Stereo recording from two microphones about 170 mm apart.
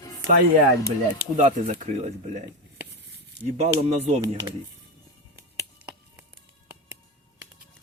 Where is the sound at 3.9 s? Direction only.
40° right (ahead or behind).